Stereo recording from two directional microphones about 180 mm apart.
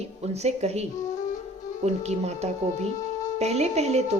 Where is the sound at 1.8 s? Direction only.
40° right (ahead or behind).